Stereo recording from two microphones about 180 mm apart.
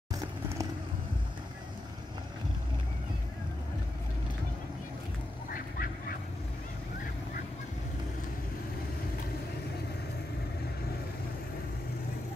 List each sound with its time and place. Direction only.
5.5 s duck: 50° left (ahead or behind)